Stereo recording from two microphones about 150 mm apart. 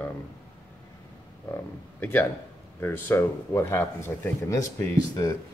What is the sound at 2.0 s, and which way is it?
Speech, 10° left (ahead or behind).